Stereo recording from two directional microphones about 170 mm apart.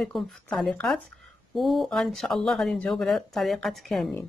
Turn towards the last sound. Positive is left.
turn(degrees=0)  # may be behind; listen again after turning